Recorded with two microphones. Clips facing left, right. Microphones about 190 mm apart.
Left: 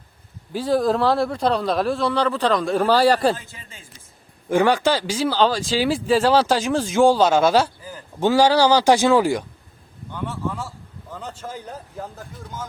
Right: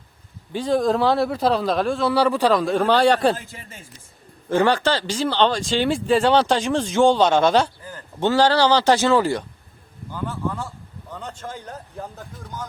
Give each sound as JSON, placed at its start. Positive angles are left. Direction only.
{"t": 0.5, "sound": "speech", "side_deg": 5}
{"t": 3.3, "sound": "a man's voice", "side_deg": -45}
{"t": 4.4, "sound": "speech", "side_deg": 10}
{"t": 10.1, "sound": "speech", "side_deg": 0}